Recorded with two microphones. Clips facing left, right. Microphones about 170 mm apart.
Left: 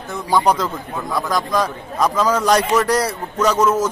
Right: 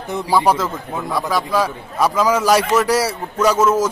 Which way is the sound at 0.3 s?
5° right (ahead or behind).